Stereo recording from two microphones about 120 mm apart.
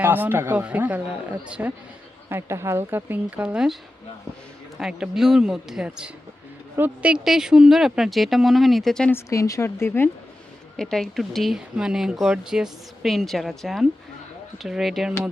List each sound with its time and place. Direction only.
0.0 s speech: 15° right (ahead or behind)
2.3 s speech: 20° right (ahead or behind)
4.8 s speech: 5° right (ahead or behind)
9.1 s a woman's voice: 25° left (ahead or behind)
10.8 s speech: 5° left (ahead or behind)